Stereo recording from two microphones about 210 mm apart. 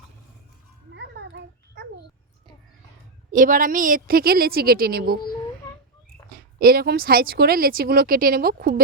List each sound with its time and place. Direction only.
0.9 s a sound: 55° right (ahead or behind)
3.3 s speech: 40° right (ahead or behind)
6.6 s speech: 45° right (ahead or behind)